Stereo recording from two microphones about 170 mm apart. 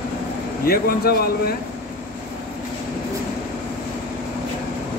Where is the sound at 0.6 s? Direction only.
65° left (ahead or behind).